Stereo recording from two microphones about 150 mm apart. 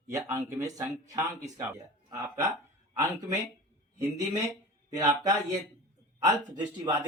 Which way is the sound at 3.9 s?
25° right (ahead or behind).